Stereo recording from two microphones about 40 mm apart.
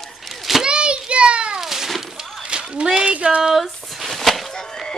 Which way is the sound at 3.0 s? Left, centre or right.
Right.